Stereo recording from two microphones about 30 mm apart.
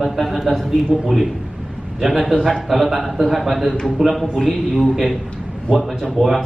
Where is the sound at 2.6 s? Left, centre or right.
Centre.